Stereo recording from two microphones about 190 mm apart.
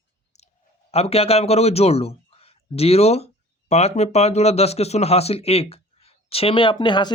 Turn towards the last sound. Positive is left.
turn(degrees=25)  # may be behind; listen again after turning